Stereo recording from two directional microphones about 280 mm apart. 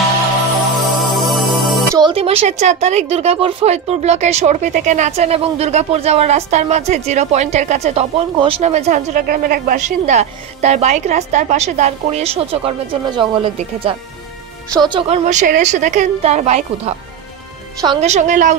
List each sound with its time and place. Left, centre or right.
0.7 s music: centre
2.0 s a woman's voice: centre